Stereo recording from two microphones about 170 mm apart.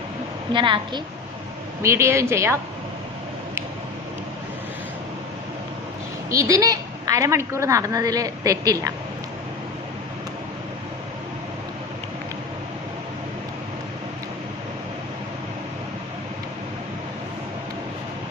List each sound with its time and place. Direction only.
0.5 s a woman's voice: 30° right (ahead or behind)
1.8 s a woman's voice: 15° right (ahead or behind)
6.3 s a woman's voice: 20° right (ahead or behind)